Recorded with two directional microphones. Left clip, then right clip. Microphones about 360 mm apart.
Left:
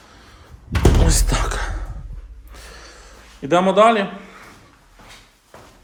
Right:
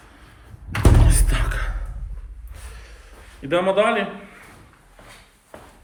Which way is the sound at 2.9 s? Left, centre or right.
Left.